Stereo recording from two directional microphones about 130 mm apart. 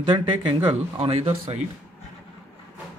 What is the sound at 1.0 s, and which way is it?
Speech, 50° right (ahead or behind).